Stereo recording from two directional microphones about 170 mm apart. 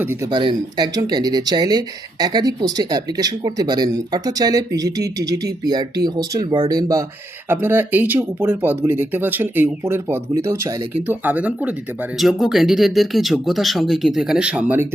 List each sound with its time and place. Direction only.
0.0 s speech: 15° right (ahead or behind)
0.3 s speech: 25° right (ahead or behind); by 14.8 s 10° right (ahead or behind)